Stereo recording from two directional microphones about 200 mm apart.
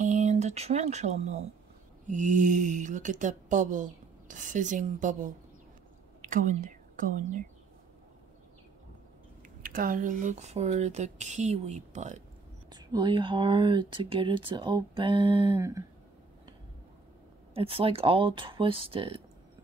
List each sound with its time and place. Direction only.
0.0 s speech: 35° right (ahead or behind)
9.6 s speech: 45° right (ahead or behind)
12.7 s speech: 20° right (ahead or behind)
17.6 s speech: 25° right (ahead or behind)